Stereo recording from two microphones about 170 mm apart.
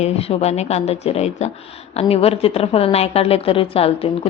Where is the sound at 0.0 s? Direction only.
35° left (ahead or behind).